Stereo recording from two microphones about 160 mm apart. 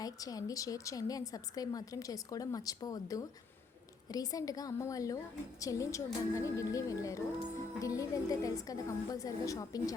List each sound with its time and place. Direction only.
0.0 s a woman's voice: 25° left (ahead or behind)